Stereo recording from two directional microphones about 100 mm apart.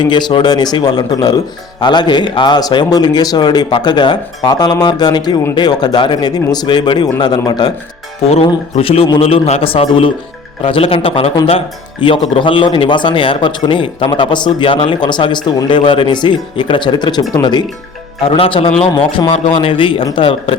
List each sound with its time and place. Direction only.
0.0 s a man's voice: 45° left (ahead or behind)
8.2 s a man's voice: 90° left; by 17.7 s 45° left (ahead or behind)
18.2 s a man's voice: 70° left (ahead or behind)